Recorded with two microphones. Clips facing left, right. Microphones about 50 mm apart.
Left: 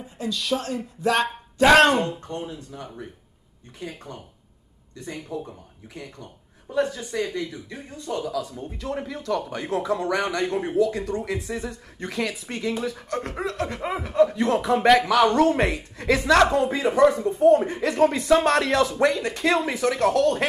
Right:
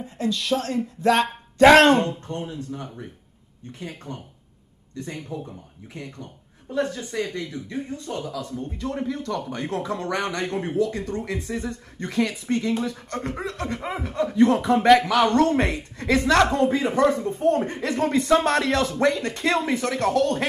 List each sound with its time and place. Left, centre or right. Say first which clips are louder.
0.0 s speech: right 3 dB; centre
2.1 s speech: right 1 dB; centre
2.4 s speech: right 3 dB; centre
4.9 s speech: even; centre